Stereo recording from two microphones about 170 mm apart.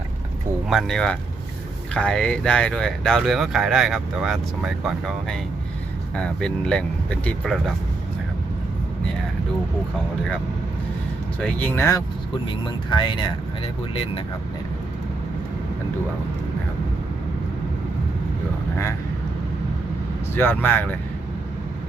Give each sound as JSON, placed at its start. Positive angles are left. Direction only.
{"t": 0.7, "sound": "speech", "side_deg": 0}
{"t": 11.3, "sound": "speech", "side_deg": 10}
{"t": 12.6, "sound": "speech", "side_deg": 30}
{"t": 20.3, "sound": "speech", "side_deg": 10}